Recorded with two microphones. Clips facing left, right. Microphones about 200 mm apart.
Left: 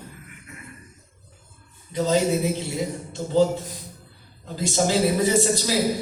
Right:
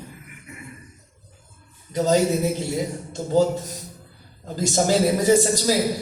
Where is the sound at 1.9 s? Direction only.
45° right (ahead or behind).